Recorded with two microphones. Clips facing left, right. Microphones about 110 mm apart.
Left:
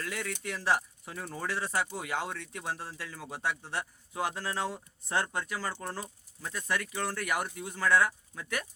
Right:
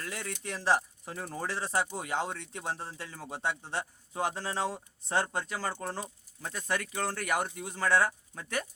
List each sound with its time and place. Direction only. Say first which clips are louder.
0.0 s speech: left 2 dB; 30° right (ahead or behind)